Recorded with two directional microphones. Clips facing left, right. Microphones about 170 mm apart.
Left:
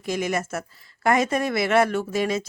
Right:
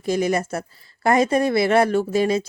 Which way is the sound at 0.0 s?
35° right (ahead or behind).